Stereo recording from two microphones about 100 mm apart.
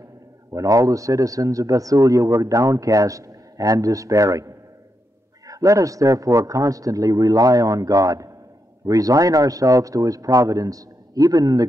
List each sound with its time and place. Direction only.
0.5 s a man's voice: 35° right (ahead or behind)